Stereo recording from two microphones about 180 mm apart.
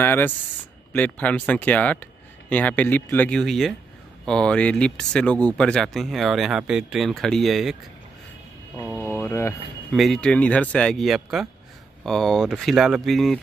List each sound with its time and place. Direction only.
0.0 s speech: 10° left (ahead or behind)
8.8 s speech: 10° right (ahead or behind)
9.2 s speech: 15° left (ahead or behind)
9.9 s speech: centre (ahead or behind)